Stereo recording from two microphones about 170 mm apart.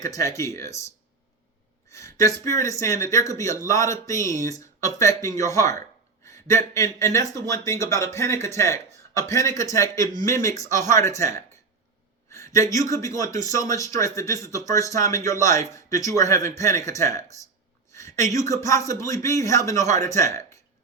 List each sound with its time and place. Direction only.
0.0 s a man's voice: 20° left (ahead or behind)